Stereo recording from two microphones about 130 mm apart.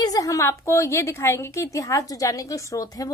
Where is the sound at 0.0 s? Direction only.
25° left (ahead or behind).